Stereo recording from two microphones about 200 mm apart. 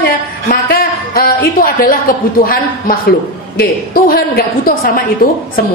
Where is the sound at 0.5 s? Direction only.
50° left (ahead or behind).